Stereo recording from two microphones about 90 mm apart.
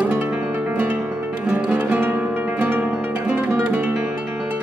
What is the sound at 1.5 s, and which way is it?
Music, 15° right (ahead or behind).